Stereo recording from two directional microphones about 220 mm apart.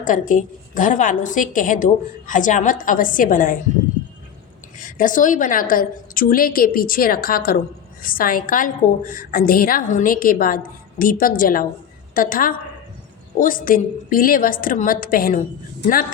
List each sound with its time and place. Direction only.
0.0 s a woman's voice: 35° left (ahead or behind)
4.8 s a woman's voice: 35° left (ahead or behind)